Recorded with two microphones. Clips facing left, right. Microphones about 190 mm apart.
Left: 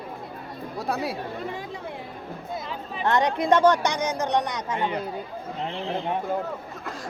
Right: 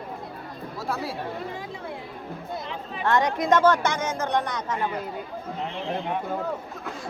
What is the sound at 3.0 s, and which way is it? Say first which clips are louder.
Speech: even; 20° left (ahead or behind).